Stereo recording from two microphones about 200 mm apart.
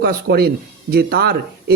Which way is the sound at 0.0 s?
50° right (ahead or behind).